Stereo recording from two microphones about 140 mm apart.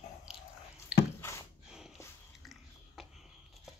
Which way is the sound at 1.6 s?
5° right (ahead or behind).